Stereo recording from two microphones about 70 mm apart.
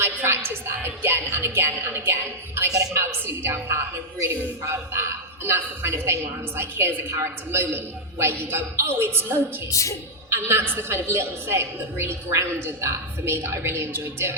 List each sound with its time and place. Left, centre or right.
0.0 s a woman's voice: right